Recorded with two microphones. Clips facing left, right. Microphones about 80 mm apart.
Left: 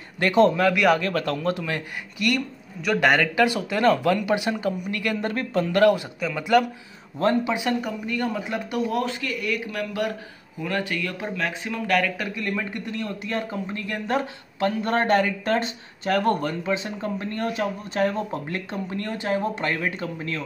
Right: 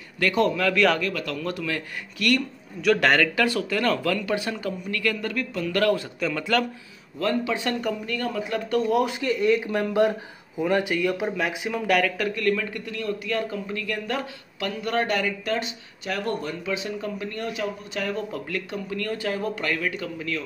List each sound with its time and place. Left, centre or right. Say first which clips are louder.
0.2 s speech: left 4 dB; left
0.7 s speech: left 1 dB; centre
1.0 s a man's voice: left 4 dB; left
2.1 s speech: right 1 dB; centre; by 5.7 s left
5.7 s speech: left 4 dB; centre
7.2 s speech: left 3 dB; left
7.5 s speech: left 1 dB; centre
8.2 s speech: left 1 dB; left
8.7 s a man's voice: right 4 dB; centre
9.0 s a man's voice: right 5 dB; right
12.4 s a man's voice: right 3 dB; left